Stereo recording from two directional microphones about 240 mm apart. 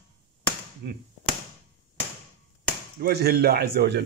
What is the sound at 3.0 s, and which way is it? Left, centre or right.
A man's voice, right.